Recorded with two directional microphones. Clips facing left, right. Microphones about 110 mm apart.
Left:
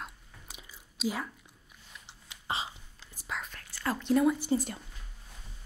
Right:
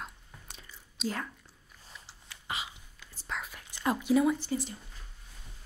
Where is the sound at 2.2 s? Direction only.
25° left (ahead or behind).